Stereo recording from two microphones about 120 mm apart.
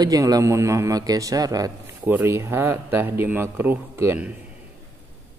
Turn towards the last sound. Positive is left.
turn(degrees=-20)  # may be behind; listen again after turning